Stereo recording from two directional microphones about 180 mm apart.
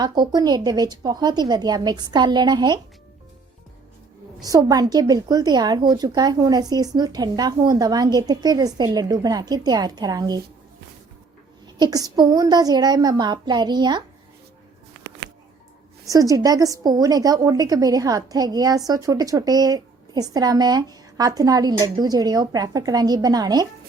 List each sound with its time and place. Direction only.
0.0 s a woman's voice: 25° right (ahead or behind)
4.4 s a woman's voice: 20° right (ahead or behind)
11.6 s a woman's voice: 20° right (ahead or behind)
15.0 s a sound: 75° right (ahead or behind)
16.0 s a woman's voice: 20° right (ahead or behind)